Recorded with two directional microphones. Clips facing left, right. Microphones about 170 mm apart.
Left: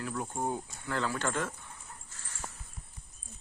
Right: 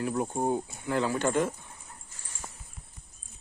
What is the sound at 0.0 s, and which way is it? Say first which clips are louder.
Speech: right 6 dB; 25° right (ahead or behind).